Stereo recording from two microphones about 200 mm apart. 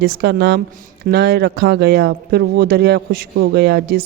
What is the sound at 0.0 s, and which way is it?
A woman's voice, 55° right (ahead or behind).